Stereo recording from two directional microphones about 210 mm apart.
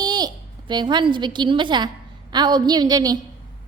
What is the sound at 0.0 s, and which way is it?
A woman's voice, 20° right (ahead or behind).